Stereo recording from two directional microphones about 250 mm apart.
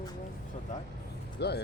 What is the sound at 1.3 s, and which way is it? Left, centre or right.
Speech, left.